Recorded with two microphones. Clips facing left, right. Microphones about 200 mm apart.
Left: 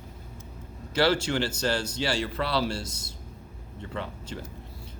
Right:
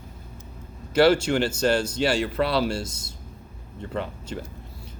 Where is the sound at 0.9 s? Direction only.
50° right (ahead or behind).